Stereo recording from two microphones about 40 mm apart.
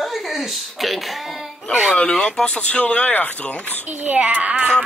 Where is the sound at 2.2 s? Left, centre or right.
Left.